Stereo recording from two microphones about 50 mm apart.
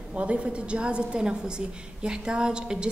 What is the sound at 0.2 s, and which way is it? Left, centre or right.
A woman's voice, right.